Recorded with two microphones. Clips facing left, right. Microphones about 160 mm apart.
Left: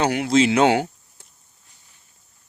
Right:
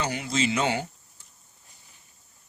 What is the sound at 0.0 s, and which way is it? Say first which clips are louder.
Speech: left 9 dB; 65° left (ahead or behind).